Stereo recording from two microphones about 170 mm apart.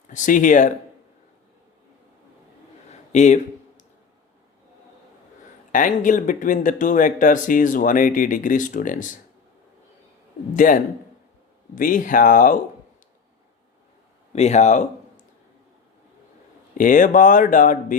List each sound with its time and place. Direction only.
0.1 s speech: 50° left (ahead or behind)
3.1 s a sound: 45° left (ahead or behind)
5.7 s speech: 50° left (ahead or behind)
10.5 s speech: 50° left (ahead or behind)
14.3 s speech: 40° left (ahead or behind)
16.7 s speech: 50° left (ahead or behind)